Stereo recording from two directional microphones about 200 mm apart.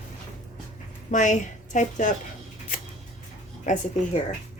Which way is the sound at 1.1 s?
40° left (ahead or behind).